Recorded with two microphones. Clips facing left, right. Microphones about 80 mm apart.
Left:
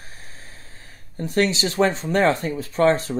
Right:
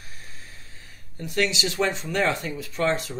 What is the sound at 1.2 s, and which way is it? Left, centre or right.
Speech, left.